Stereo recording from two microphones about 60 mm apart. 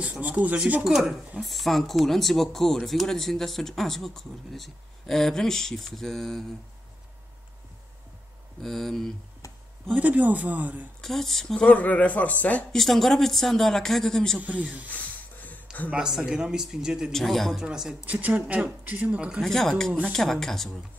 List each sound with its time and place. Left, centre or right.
0.0 s speech: right
0.8 s speech: centre
8.5 s speech: centre
9.9 s speech: right
11.0 s speech: centre
11.6 s a man's voice: left
12.7 s speech: centre
15.7 s a sound: centre
16.1 s speech: centre
17.1 s speech: centre
17.6 s speech: centre
18.0 s speech: right
19.4 s speech: centre